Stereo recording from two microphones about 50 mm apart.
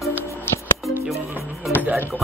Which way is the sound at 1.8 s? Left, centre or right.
Right.